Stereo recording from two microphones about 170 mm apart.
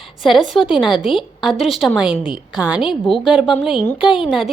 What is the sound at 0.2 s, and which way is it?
A woman's voice, centre (ahead or behind).